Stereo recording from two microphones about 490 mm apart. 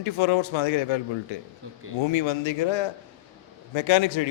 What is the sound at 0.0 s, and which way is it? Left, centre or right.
A man's voice, left.